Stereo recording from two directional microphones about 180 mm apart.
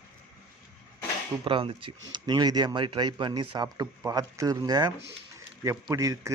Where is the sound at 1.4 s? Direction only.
30° right (ahead or behind).